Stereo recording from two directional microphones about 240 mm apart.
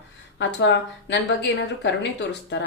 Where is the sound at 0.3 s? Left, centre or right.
Left.